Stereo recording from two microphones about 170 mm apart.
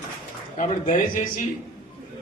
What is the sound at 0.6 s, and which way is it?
Speech, 45° left (ahead or behind).